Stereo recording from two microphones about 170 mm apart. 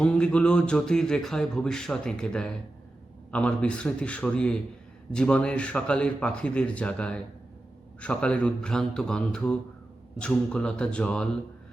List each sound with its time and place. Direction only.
0.0 s a man's voice: 5° left (ahead or behind)